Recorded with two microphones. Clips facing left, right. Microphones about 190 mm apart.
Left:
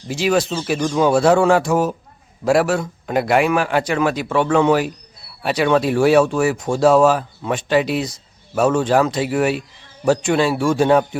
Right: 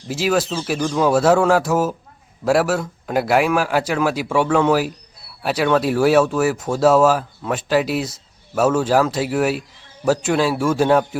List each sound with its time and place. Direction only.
0.1 s a man's voice: centre (ahead or behind)